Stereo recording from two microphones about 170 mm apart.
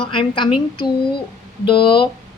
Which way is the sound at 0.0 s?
30° left (ahead or behind).